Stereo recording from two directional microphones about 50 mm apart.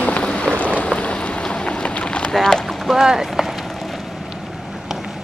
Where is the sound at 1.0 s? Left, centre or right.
Left.